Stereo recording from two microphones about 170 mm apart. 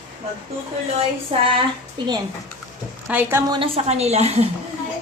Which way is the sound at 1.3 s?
35° right (ahead or behind).